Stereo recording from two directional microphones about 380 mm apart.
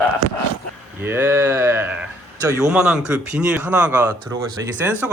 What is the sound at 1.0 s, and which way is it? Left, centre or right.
Speech, centre.